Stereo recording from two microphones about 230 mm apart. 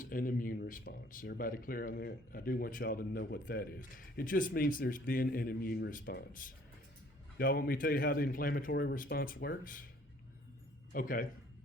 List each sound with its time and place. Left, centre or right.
0.0 s speech: left
10.9 s speech: left